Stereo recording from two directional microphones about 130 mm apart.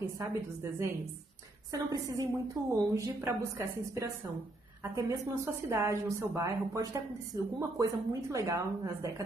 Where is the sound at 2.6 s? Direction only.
20° right (ahead or behind).